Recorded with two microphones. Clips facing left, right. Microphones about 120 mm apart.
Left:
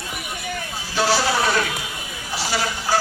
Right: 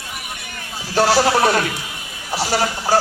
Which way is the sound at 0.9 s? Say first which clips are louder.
Right 5 dB; 60° right (ahead or behind).